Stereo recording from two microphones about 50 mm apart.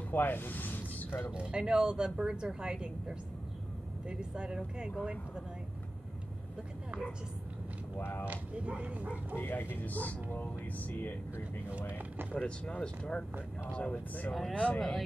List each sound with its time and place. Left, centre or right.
0.1 s a sound: left
1.3 s speech: centre
8.0 s speech: left
8.3 s speech: right
9.4 s speech: left
12.4 s speech: left